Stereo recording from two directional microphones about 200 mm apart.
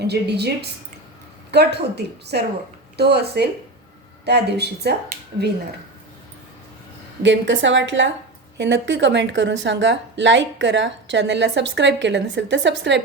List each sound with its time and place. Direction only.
0.0 s speech: 55° right (ahead or behind)
7.2 s a woman's voice: 65° right (ahead or behind)